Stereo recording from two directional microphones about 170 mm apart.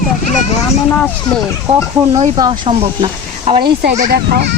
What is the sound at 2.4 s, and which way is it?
Speech, 30° right (ahead or behind).